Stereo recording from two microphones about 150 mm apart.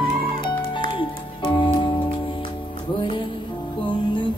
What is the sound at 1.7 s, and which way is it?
Music, 30° left (ahead or behind).